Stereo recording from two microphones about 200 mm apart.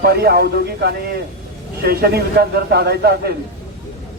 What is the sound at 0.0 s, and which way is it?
A man's voice, 50° right (ahead or behind).